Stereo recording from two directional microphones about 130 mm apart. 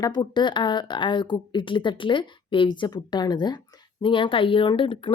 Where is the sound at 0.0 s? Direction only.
35° left (ahead or behind).